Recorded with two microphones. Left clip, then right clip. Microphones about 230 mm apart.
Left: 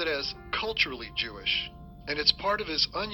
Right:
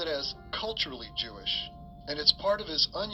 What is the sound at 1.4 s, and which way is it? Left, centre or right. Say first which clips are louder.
Speech: left 4 dB; left.